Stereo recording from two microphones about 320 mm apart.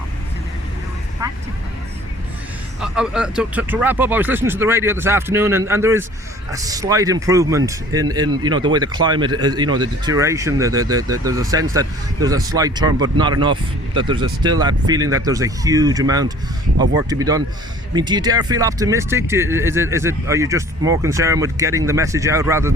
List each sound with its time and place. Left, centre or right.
1.2 s vehicle: centre
2.8 s speech: centre